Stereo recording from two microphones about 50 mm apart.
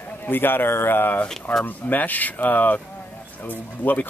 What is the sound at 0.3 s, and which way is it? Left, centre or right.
A man's voice, left.